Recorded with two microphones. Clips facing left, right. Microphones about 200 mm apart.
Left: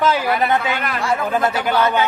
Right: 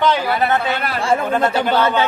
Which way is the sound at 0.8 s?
30° right (ahead or behind).